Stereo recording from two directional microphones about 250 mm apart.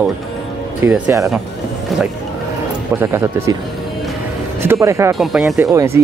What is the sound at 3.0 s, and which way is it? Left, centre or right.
Speech, centre.